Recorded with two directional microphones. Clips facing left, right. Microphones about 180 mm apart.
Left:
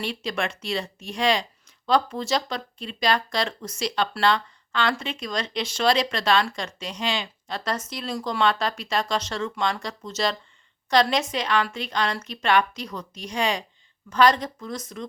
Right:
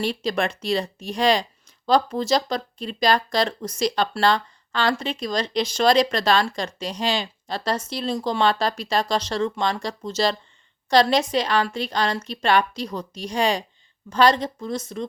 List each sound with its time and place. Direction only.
0.0 s a woman's voice: 35° right (ahead or behind)